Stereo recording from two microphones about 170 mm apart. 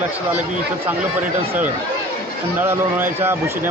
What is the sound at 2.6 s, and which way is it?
Speech, 15° right (ahead or behind).